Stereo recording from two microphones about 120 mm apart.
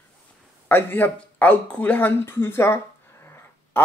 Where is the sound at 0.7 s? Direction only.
20° left (ahead or behind).